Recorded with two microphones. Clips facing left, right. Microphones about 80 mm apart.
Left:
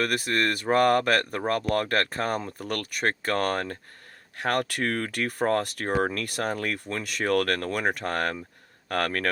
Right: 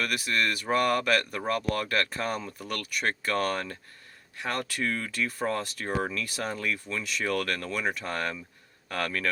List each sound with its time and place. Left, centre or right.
0.0 s speech: left
4.4 s speech: left